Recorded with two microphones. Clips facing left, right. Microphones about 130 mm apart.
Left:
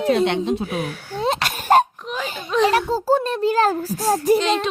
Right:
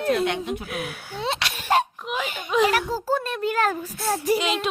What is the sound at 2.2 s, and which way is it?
A child's voice, 35° left (ahead or behind).